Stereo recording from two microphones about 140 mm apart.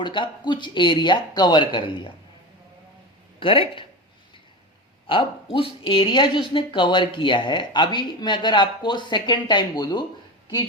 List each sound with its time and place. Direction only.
0.0 s speech: 35° left (ahead or behind)
3.4 s speech: 40° left (ahead or behind)
5.0 s speech: 40° left (ahead or behind)